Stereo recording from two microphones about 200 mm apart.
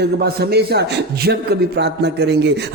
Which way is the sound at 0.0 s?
50° right (ahead or behind).